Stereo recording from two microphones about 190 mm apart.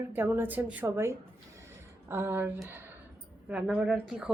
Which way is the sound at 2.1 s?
10° right (ahead or behind).